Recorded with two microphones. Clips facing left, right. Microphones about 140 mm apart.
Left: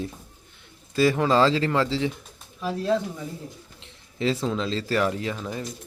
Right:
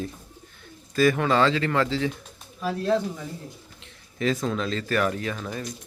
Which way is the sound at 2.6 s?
10° left (ahead or behind).